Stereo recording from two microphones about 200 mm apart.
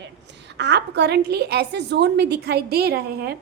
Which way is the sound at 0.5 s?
60° right (ahead or behind).